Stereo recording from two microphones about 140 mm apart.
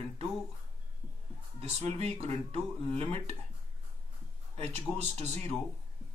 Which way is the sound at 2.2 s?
45° right (ahead or behind).